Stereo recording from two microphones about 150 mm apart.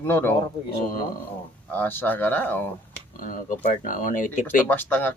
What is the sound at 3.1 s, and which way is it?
Speech, 65° left (ahead or behind).